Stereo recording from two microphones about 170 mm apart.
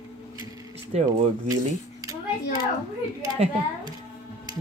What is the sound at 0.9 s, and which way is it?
Speech, 40° right (ahead or behind).